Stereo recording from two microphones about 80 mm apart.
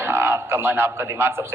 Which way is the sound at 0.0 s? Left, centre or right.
Right.